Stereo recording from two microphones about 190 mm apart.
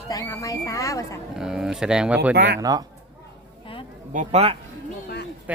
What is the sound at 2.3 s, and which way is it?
Speech, 65° right (ahead or behind).